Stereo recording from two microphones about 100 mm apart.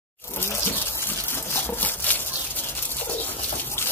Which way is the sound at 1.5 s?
20° left (ahead or behind).